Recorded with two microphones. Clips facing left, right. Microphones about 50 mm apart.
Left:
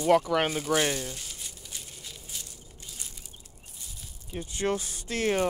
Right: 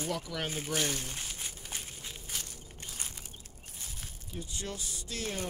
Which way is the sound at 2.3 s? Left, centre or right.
Right.